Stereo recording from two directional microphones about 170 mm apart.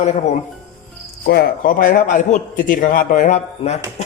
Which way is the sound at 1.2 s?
65° left (ahead or behind).